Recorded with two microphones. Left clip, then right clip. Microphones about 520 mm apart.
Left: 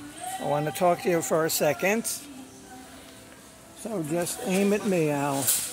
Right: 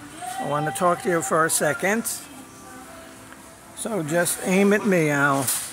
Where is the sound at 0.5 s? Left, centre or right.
Left.